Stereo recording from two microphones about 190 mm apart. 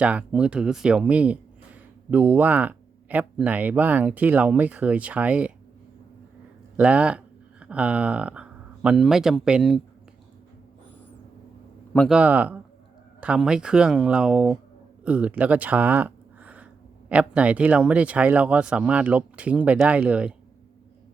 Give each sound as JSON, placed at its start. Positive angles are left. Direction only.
{"t": 0.0, "sound": "a man's voice", "side_deg": -5}
{"t": 6.7, "sound": "a man's voice", "side_deg": -5}
{"t": 11.9, "sound": "a man's voice", "side_deg": -5}